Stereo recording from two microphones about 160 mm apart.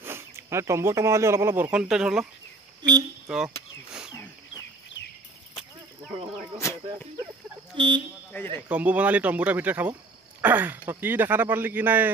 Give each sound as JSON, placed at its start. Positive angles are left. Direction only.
{"t": 0.0, "sound": "speech", "side_deg": -15}
{"t": 2.8, "sound": "speech", "side_deg": -25}
{"t": 6.6, "sound": "a sound", "side_deg": 15}
{"t": 7.7, "sound": "speech", "side_deg": -30}
{"t": 8.6, "sound": "speech", "side_deg": -10}